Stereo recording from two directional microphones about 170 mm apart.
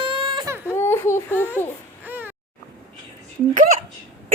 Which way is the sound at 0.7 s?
15° left (ahead or behind).